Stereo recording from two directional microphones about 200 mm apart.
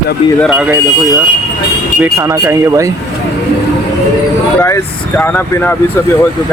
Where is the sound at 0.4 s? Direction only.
5° right (ahead or behind).